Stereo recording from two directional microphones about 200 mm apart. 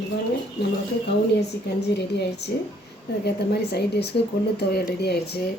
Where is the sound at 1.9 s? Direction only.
55° left (ahead or behind).